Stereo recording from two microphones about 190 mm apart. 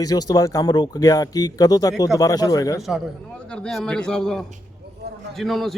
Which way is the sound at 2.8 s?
Centre (ahead or behind).